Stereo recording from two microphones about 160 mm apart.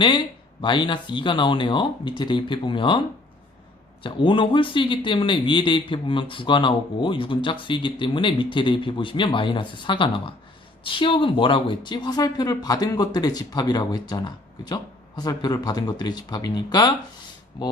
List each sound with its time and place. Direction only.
0.6 s speech: 30° left (ahead or behind)
4.0 s speech: 30° left (ahead or behind)